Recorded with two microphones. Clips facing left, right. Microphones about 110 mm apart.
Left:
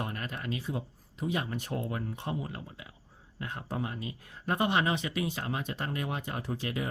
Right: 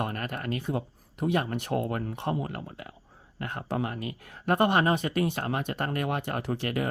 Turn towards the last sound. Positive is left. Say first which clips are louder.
# right 5 dB
turn(degrees=-60)  # may be behind; listen again after turning